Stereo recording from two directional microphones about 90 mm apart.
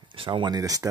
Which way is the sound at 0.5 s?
40° right (ahead or behind).